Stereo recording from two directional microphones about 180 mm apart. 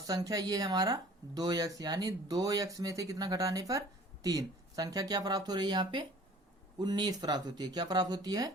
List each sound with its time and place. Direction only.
0.1 s speech: 20° right (ahead or behind)